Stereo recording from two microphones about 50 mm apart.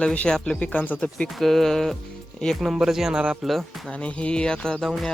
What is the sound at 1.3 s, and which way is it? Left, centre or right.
Speech, centre.